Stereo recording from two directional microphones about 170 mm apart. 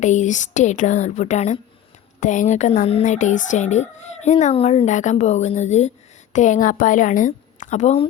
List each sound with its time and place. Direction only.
0.0 s a woman's voice: 45° left (ahead or behind)